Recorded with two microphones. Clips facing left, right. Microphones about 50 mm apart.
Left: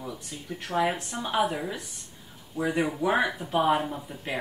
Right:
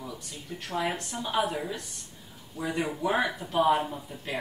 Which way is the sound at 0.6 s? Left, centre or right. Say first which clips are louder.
Left 4 dB; centre.